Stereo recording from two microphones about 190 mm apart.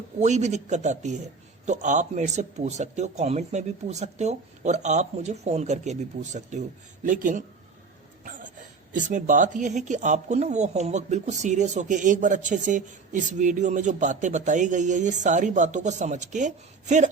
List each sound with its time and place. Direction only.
0.2 s speech: 35° right (ahead or behind)